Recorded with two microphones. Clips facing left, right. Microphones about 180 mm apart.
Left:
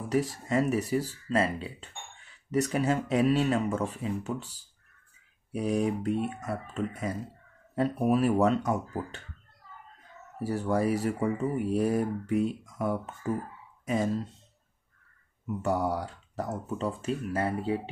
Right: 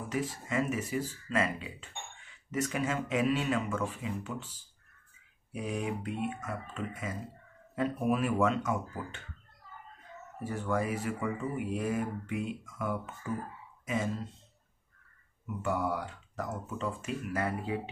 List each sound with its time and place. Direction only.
0.1 s speech: 40° left (ahead or behind)
10.4 s speech: 35° left (ahead or behind)
15.4 s speech: 40° left (ahead or behind)